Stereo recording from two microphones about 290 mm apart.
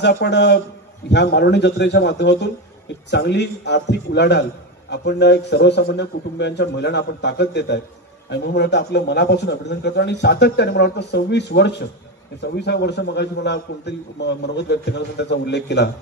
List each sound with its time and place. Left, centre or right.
0.0 s a man's voice: left